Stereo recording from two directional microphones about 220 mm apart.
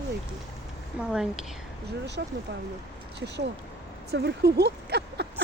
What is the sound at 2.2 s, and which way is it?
Speech, 50° right (ahead or behind).